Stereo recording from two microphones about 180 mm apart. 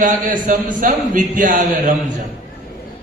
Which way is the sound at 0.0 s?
45° right (ahead or behind).